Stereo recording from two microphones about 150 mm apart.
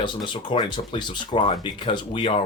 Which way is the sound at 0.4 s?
30° left (ahead or behind).